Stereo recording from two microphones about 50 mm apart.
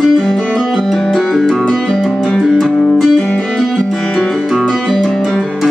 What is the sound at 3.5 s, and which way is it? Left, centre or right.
Music, centre.